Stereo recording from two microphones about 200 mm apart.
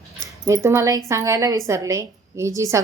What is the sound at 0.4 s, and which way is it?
Speech, 15° right (ahead or behind).